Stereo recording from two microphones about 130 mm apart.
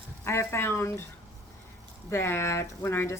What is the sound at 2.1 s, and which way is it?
Speech, 20° left (ahead or behind).